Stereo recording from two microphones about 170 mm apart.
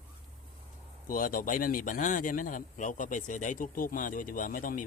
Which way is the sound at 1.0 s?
55° left (ahead or behind).